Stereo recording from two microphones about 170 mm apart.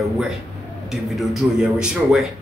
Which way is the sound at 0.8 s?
Centre (ahead or behind).